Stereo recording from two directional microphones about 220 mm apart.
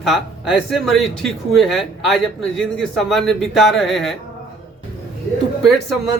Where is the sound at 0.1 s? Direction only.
Centre (ahead or behind).